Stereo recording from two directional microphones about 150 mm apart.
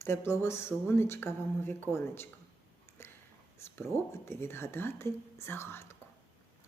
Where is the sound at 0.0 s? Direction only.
15° left (ahead or behind).